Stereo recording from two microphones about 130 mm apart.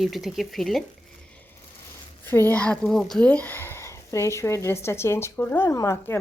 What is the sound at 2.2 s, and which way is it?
A woman's voice, 15° left (ahead or behind).